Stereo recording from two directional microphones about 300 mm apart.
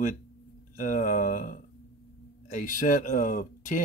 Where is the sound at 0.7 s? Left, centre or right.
Left.